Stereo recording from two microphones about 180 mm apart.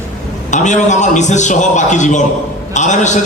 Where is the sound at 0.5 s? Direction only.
40° left (ahead or behind).